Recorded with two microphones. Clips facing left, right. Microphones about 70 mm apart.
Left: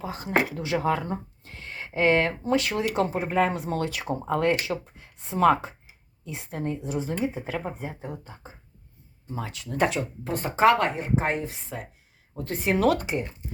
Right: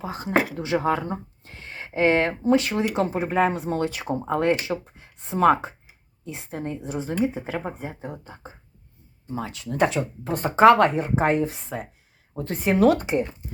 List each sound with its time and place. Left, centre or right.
0.0 s speech: right